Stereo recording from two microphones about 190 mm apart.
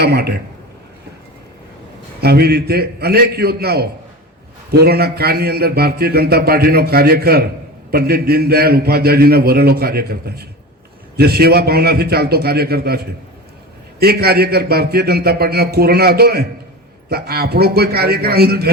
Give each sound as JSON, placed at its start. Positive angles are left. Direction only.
{"t": 0.0, "sound": "a man's voice", "side_deg": -60}
{"t": 2.2, "sound": "a man's voice", "side_deg": -55}